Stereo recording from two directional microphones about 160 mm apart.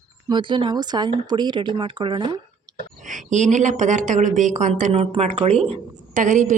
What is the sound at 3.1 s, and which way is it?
Speech, 50° right (ahead or behind).